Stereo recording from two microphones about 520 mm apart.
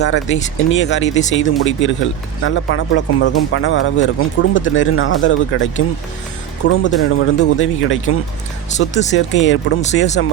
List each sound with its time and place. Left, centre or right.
0.0 s speech: left
6.8 s speech: left